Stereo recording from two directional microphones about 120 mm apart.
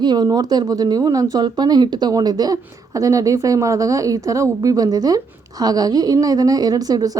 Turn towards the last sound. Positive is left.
turn(degrees=-30)  # may be behind; listen again after turning